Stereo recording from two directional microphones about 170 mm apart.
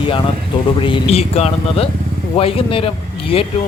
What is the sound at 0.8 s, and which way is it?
Speech, 35° left (ahead or behind).